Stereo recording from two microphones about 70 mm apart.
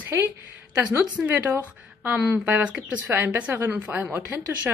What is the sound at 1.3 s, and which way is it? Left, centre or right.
Speech, right.